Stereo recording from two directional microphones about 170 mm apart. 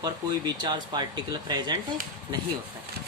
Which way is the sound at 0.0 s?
25° right (ahead or behind).